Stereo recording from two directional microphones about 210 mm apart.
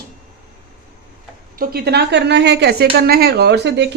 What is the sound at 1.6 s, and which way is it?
Speech, 50° right (ahead or behind).